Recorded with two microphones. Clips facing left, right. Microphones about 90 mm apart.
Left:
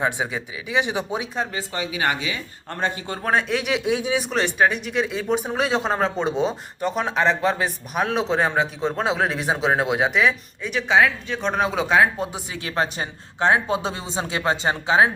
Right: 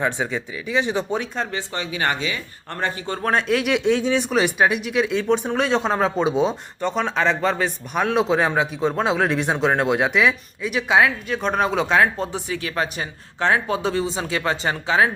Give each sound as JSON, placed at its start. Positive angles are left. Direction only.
{"t": 0.0, "sound": "speech", "side_deg": 15}
{"t": 3.3, "sound": "speech", "side_deg": 0}
{"t": 12.6, "sound": "speech", "side_deg": 30}